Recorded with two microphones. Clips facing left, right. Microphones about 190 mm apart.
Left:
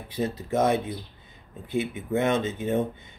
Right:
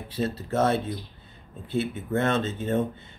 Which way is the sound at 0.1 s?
15° left (ahead or behind).